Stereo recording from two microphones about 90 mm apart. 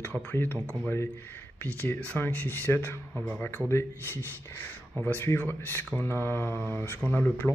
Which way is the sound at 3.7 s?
25° left (ahead or behind).